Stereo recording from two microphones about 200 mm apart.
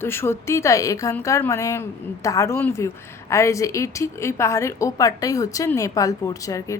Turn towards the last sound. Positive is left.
turn(degrees=15)  # may be behind; listen again after turning